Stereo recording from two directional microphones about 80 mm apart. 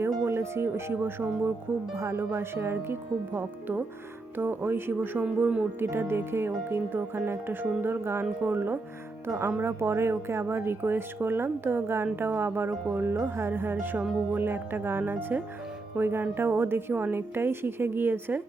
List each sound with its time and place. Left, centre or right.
0.3 s speech: right; by 5.6 s centre
5.8 s speech: right